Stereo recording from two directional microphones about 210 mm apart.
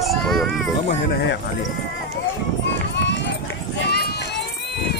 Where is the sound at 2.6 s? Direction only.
55° left (ahead or behind).